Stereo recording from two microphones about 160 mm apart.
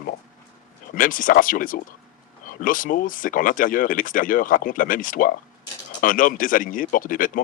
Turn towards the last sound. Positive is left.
turn(degrees=60)  # may be behind; listen again after turning